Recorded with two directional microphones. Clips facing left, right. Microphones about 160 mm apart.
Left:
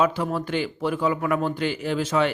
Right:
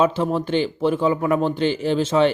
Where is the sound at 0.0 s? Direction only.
25° right (ahead or behind).